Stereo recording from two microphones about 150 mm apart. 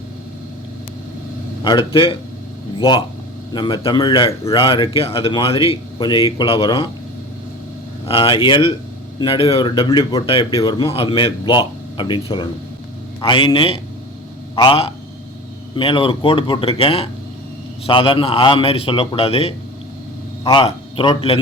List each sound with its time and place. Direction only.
1.6 s a man's voice: 30° left (ahead or behind)
8.0 s a man's voice: 35° left (ahead or behind)
10.2 s a man's voice: 40° left (ahead or behind)